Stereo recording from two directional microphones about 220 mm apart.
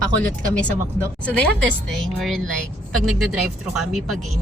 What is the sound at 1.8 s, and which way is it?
A woman's voice, centre (ahead or behind).